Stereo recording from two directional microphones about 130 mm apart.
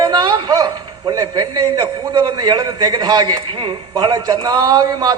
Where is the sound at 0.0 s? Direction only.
30° right (ahead or behind).